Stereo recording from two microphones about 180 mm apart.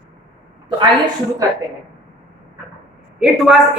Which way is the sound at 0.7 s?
25° right (ahead or behind).